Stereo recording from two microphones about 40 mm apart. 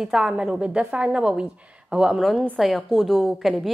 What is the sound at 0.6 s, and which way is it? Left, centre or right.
A woman's voice, right.